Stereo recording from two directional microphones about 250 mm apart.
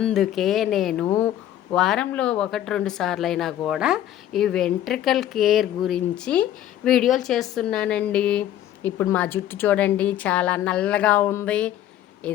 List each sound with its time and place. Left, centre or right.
0.0 s speech: centre